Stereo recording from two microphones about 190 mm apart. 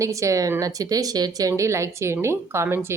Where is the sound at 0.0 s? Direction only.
15° right (ahead or behind).